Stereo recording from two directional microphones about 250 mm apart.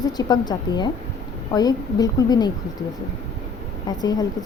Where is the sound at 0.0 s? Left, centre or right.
Centre.